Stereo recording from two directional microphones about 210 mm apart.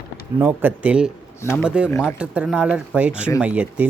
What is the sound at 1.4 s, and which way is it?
Speech, 10° left (ahead or behind).